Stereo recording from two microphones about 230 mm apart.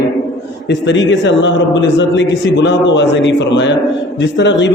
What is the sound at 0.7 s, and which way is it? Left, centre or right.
A man's voice, left.